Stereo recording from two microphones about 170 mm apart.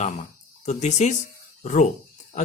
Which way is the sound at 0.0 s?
45° left (ahead or behind).